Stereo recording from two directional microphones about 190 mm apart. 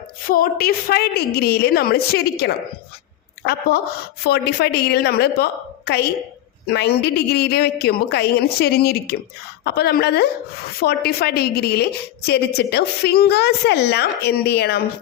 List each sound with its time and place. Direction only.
0.3 s a woman's voice: 50° left (ahead or behind)